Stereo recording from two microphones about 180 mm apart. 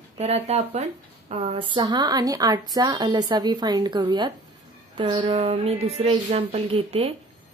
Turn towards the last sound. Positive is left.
turn(degrees=-30)  # may be behind; listen again after turning